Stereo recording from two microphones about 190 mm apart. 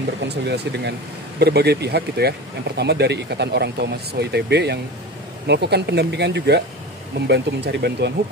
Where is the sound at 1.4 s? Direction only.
60° right (ahead or behind).